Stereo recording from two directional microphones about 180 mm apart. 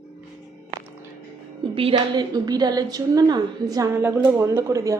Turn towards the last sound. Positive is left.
turn(degrees=-15)  # may be behind; listen again after turning